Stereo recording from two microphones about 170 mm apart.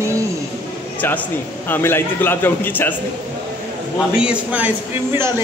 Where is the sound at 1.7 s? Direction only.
10° left (ahead or behind).